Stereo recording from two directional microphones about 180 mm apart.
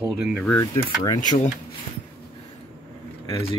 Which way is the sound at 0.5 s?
20° left (ahead or behind).